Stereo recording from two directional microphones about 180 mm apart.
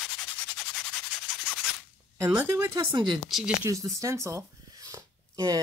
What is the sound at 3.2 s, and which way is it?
Speech, centre (ahead or behind).